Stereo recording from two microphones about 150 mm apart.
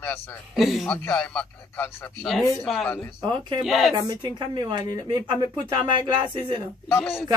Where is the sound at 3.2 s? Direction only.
30° right (ahead or behind).